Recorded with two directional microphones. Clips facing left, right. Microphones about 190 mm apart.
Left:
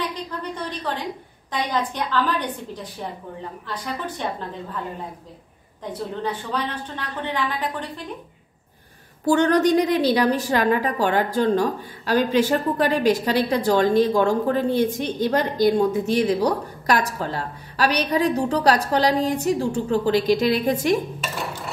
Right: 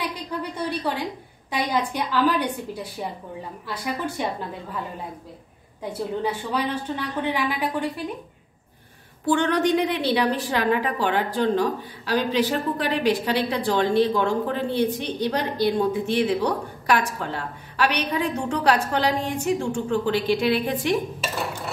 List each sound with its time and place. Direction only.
0.0 s a sound: 10° right (ahead or behind)
1.5 s a woman's voice: 10° right (ahead or behind)
6.2 s a woman's voice: 10° right (ahead or behind)
9.2 s a woman's voice: 40° left (ahead or behind)